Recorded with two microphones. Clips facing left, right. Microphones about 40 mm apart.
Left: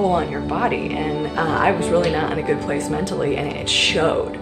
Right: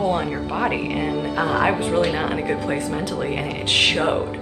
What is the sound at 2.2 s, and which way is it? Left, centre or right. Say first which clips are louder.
A woman's voice: left 2 dB; centre.